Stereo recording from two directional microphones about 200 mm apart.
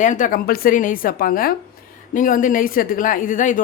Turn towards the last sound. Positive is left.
turn(degrees=40)  # may be behind; listen again after turning